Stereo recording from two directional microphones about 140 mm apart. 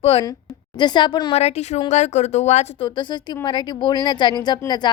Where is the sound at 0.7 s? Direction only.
30° left (ahead or behind).